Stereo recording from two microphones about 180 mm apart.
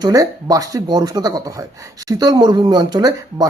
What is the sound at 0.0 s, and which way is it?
Speech, 20° right (ahead or behind).